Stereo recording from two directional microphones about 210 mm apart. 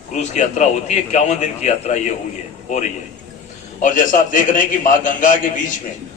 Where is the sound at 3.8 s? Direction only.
35° left (ahead or behind).